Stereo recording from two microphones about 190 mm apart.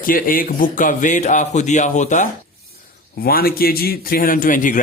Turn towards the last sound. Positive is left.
turn(degrees=45)  # may be behind; listen again after turning